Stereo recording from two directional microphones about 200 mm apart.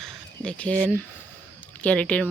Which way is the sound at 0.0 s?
5° left (ahead or behind).